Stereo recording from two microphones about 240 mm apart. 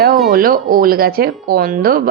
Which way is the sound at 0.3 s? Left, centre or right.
Right.